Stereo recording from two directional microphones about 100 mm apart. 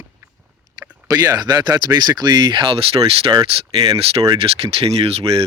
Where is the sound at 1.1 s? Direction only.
35° right (ahead or behind); by 3.3 s 70° right (ahead or behind).